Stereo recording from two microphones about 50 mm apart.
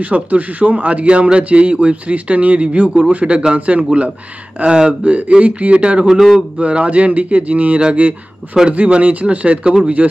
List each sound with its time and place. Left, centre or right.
0.0 s a man's voice: right